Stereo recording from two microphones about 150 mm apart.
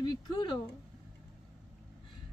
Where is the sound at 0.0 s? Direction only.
30° left (ahead or behind).